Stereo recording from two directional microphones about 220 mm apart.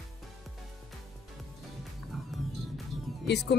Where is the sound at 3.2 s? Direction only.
50° left (ahead or behind).